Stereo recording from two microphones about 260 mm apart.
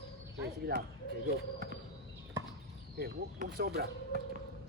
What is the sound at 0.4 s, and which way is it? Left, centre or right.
Speech, right.